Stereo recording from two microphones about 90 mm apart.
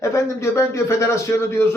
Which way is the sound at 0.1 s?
30° left (ahead or behind).